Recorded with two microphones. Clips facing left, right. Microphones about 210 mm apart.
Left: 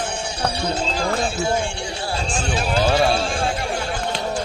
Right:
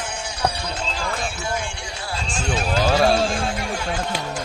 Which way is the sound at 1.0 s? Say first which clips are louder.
Left 6 dB; 30° left (ahead or behind).